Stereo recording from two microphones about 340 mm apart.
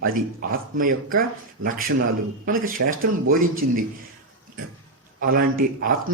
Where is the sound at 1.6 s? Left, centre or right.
Right.